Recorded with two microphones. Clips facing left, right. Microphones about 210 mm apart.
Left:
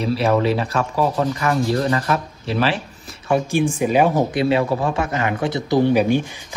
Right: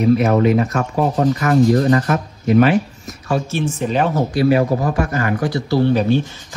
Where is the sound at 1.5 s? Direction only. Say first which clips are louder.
Right 8 dB; 45° right (ahead or behind).